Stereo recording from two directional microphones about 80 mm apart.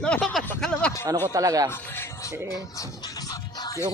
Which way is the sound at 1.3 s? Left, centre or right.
Right.